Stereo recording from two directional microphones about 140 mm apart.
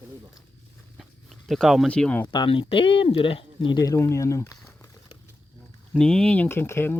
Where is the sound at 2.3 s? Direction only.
35° left (ahead or behind).